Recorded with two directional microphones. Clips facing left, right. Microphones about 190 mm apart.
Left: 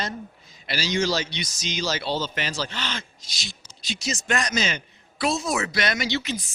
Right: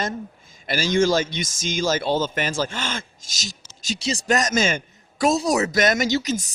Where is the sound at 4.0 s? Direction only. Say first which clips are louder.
Right 5 dB; 30° right (ahead or behind).